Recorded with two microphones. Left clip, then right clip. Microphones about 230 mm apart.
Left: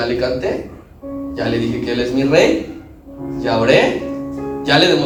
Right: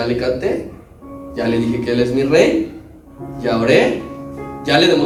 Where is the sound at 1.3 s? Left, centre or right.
Right.